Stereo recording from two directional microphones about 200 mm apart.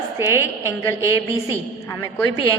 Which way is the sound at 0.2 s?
10° right (ahead or behind).